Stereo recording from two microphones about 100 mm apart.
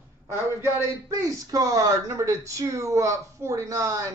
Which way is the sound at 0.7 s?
30° right (ahead or behind).